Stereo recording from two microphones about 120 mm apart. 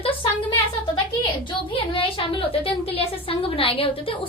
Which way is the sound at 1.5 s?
45° left (ahead or behind).